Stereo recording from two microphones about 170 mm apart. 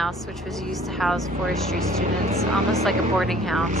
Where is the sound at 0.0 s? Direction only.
Centre (ahead or behind).